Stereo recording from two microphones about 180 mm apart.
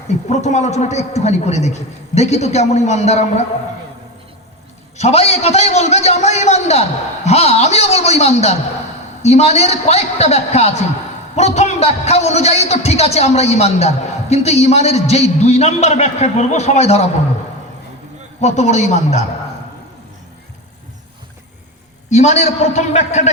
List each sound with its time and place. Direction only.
0.3 s a man's voice: 40° left (ahead or behind)
4.9 s a man's voice: 35° left (ahead or behind)
18.3 s a man's voice: 40° left (ahead or behind)
22.1 s a man's voice: 40° left (ahead or behind)